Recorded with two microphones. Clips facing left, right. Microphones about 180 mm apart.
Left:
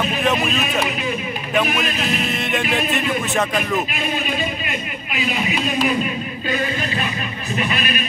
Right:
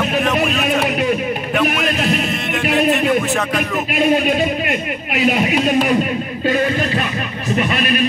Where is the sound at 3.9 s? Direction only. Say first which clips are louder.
Right 9 dB; 60° right (ahead or behind).